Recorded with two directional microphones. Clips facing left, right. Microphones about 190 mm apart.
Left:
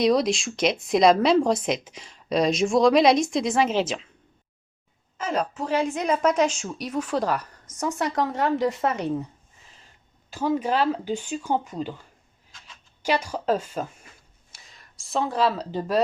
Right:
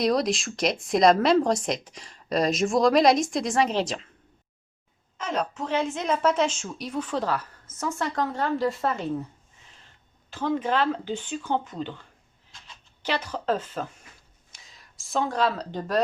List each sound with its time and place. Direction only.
0.0 s speech: centre (ahead or behind)
5.1 s a woman's voice: 5° left (ahead or behind)
10.2 s a woman's voice: 10° left (ahead or behind)
14.7 s speech: centre (ahead or behind)